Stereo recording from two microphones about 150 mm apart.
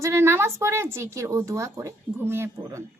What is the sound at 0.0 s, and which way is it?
A woman's voice, 20° right (ahead or behind).